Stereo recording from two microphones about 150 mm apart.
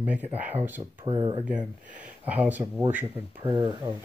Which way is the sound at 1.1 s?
35° right (ahead or behind).